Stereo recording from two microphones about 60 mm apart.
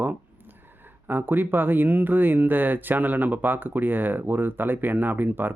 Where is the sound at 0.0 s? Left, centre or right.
Right.